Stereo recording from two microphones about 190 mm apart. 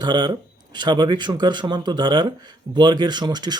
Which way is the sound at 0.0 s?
20° right (ahead or behind).